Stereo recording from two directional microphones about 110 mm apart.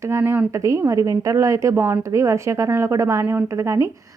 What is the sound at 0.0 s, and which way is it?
A woman's voice, 25° right (ahead or behind).